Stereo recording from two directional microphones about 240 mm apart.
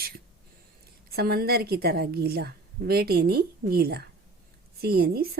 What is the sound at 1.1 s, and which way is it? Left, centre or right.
A woman's voice, right.